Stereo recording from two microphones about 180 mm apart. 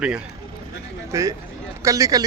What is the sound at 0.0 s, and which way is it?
Speech, 5° right (ahead or behind).